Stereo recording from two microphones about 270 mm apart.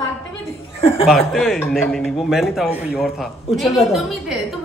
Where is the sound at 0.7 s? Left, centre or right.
Left.